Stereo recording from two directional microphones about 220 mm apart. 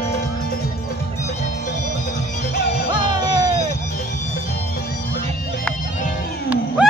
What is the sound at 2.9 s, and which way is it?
Music, 15° right (ahead or behind).